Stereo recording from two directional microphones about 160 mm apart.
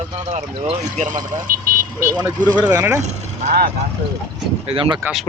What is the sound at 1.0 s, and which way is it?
Speech, 55° right (ahead or behind).